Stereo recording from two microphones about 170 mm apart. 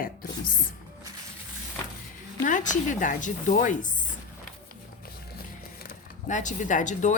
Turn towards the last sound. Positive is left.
turn(degrees=45)  # may be behind; listen again after turning